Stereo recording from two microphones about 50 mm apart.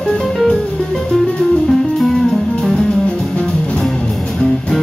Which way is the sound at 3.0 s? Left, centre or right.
Left.